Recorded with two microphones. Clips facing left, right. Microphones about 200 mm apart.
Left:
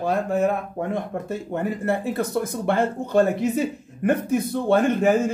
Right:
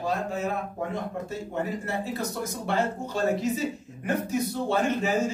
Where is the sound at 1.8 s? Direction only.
55° left (ahead or behind).